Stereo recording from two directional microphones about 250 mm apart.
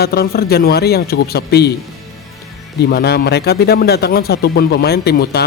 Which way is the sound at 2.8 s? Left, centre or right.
Left.